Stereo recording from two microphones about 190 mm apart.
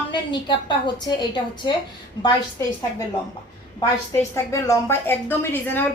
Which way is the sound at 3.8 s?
15° left (ahead or behind).